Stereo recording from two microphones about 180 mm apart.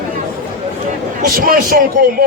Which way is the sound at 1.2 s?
50° right (ahead or behind).